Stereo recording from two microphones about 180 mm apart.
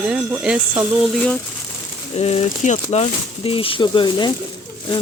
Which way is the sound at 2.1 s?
35° left (ahead or behind).